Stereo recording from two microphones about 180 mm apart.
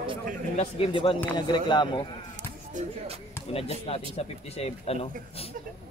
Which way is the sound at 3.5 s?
35° left (ahead or behind).